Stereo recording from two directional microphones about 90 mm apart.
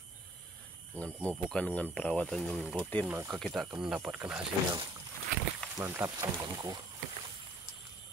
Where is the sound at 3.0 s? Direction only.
25° right (ahead or behind).